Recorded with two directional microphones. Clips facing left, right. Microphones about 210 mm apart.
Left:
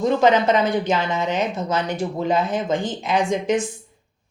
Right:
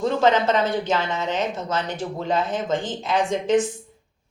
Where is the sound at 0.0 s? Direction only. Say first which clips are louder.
Left 2 dB; 15° left (ahead or behind).